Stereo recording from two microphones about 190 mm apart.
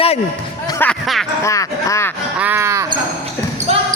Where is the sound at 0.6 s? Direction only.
10° left (ahead or behind).